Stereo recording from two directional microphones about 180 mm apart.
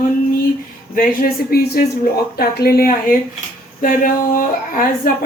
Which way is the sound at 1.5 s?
60° left (ahead or behind).